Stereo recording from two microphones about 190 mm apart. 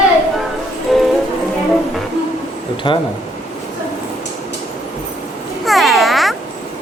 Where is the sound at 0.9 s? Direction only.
Centre (ahead or behind).